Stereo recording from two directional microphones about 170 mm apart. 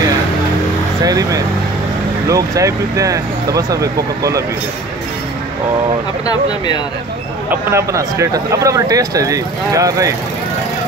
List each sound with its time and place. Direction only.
1.0 s speech: 20° right (ahead or behind)
7.7 s speech: 15° right (ahead or behind)